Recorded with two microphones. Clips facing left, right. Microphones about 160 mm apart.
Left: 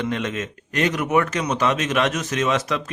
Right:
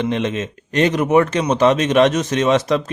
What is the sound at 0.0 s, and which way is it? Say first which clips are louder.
Speech: right 5 dB; 25° right (ahead or behind).